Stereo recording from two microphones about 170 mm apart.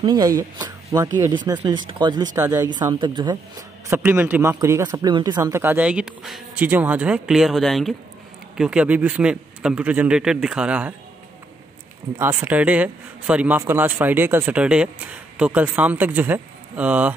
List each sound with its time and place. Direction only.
0.0 s speech: 25° right (ahead or behind)
2.4 s a man's voice: 10° right (ahead or behind)
2.7 s speech: 25° right (ahead or behind)
3.9 s a man's voice: 10° right (ahead or behind)
12.2 s a man's voice: 15° right (ahead or behind)